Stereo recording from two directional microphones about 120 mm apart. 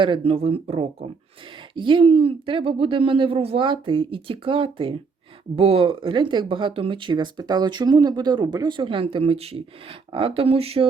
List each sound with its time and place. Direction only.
0.0 s speech: 50° right (ahead or behind)
1.7 s speech: 45° right (ahead or behind)